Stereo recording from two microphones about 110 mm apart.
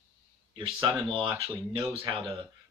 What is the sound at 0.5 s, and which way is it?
Speech, 50° right (ahead or behind).